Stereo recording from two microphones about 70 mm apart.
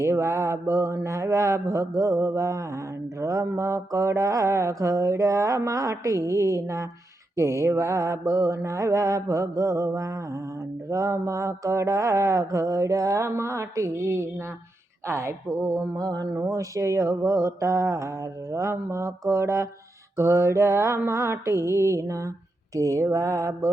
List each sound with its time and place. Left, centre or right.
0.0 s mantra: right
15.0 s speech: right
16.0 s a sound: right
16.4 s mantra: right